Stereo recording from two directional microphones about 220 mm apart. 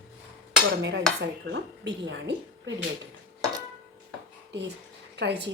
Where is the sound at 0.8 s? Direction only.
55° right (ahead or behind).